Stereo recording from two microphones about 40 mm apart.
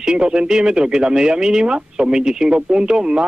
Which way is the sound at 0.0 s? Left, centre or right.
Right.